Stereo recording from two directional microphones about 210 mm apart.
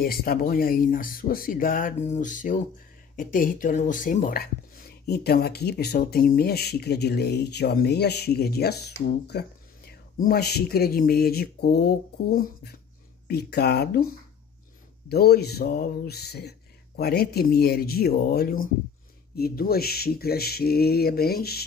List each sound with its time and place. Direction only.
0.0 s speech: 45° left (ahead or behind)